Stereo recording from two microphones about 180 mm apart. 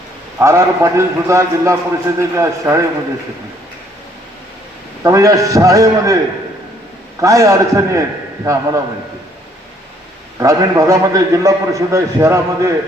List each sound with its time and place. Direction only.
0.3 s a man's voice: 15° right (ahead or behind)
5.0 s a man's voice: 20° right (ahead or behind)
7.2 s a man's voice: 15° right (ahead or behind)
10.4 s a man's voice: 15° right (ahead or behind)